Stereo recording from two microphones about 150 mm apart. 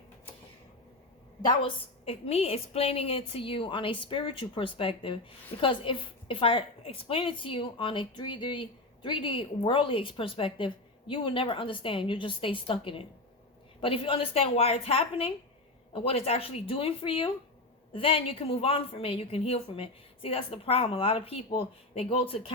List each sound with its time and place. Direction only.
1.5 s a woman's voice: 35° left (ahead or behind)